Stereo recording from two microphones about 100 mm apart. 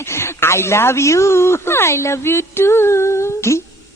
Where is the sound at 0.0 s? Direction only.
25° left (ahead or behind).